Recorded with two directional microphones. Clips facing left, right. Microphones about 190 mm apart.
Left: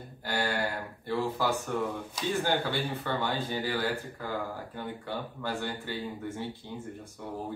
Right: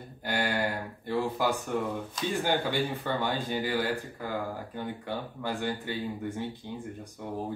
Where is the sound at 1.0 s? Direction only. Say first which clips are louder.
Right 1 dB; 15° right (ahead or behind).